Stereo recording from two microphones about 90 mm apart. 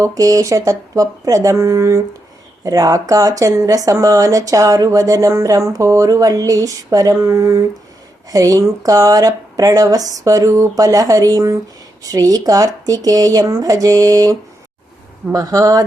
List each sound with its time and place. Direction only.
0.0 s speech: 40° right (ahead or behind)